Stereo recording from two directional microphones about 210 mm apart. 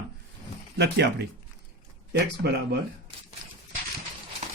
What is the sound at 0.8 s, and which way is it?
Speech, 55° right (ahead or behind).